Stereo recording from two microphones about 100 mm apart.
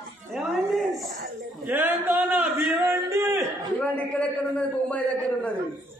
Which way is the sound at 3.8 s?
15° left (ahead or behind).